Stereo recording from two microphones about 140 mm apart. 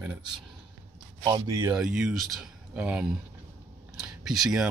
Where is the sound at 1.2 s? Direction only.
25° right (ahead or behind).